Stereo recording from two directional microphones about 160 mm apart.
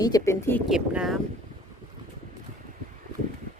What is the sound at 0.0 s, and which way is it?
Speech, 20° left (ahead or behind).